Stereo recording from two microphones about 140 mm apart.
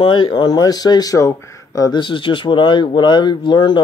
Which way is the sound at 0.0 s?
35° left (ahead or behind).